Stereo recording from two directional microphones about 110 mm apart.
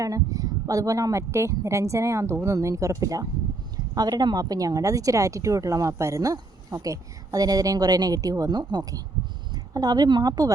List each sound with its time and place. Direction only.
0.0 s a woman's voice: 30° right (ahead or behind)